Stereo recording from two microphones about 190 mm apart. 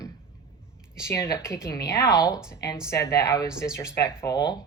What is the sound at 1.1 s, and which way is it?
Speech, 15° left (ahead or behind).